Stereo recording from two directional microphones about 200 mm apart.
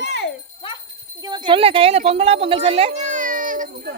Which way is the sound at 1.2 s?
20° right (ahead or behind).